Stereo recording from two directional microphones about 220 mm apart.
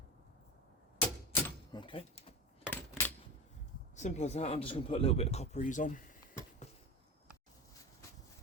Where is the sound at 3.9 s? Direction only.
30° left (ahead or behind).